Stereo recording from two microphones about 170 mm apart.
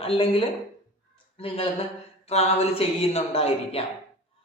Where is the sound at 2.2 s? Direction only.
40° left (ahead or behind).